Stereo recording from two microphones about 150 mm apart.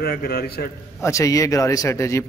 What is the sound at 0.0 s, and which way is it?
Speech, 90° left.